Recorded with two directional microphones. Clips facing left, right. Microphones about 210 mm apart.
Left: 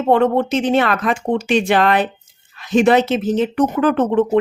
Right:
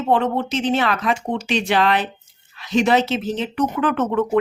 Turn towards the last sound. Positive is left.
turn(degrees=30)  # may be behind; listen again after turning